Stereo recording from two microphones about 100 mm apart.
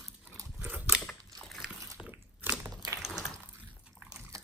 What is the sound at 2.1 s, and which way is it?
Crunch, 20° right (ahead or behind).